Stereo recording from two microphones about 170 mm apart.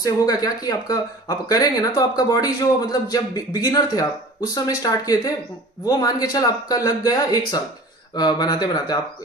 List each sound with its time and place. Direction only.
0.0 s speech: 20° left (ahead or behind)